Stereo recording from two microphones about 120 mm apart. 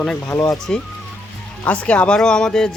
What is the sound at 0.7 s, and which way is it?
Speech, 5° left (ahead or behind).